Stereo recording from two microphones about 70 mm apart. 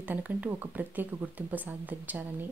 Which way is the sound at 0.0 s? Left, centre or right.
Right.